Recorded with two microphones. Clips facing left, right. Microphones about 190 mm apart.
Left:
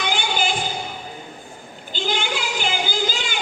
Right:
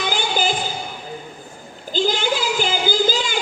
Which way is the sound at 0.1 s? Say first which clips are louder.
Right 2 dB; 40° right (ahead or behind).